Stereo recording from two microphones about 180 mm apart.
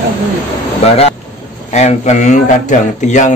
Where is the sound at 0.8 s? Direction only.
35° left (ahead or behind).